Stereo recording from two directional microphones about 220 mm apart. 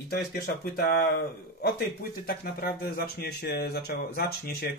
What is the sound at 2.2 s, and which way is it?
Speech, 45° left (ahead or behind).